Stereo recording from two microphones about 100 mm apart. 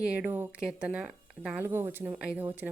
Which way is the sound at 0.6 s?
10° right (ahead or behind).